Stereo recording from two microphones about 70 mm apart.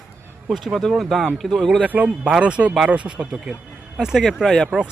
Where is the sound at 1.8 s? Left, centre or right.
Right; by 4.6 s centre.